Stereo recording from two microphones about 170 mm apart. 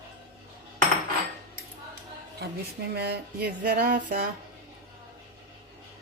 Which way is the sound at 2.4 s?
75° right (ahead or behind).